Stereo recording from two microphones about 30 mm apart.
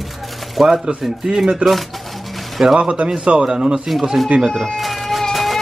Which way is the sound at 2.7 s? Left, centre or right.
Right.